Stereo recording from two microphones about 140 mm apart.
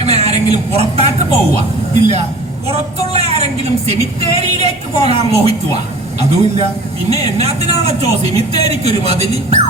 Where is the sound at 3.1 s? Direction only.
50° right (ahead or behind).